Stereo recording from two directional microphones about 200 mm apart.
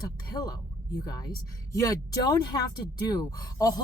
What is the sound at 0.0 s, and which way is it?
A woman's voice, 20° left (ahead or behind).